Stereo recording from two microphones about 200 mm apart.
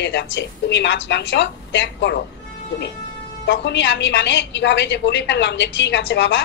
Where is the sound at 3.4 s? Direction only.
60° left (ahead or behind).